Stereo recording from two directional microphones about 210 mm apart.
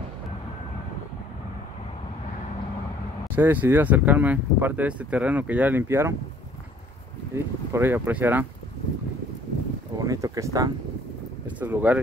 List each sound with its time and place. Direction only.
3.3 s speech: 10° right (ahead or behind)
7.3 s speech: 10° right (ahead or behind)
9.9 s speech: 15° right (ahead or behind)